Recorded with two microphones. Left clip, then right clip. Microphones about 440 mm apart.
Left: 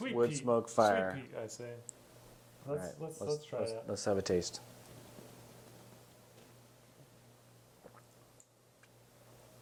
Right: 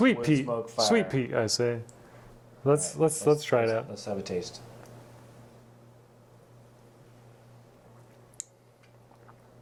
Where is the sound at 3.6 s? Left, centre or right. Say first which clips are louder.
Right 9 dB; left.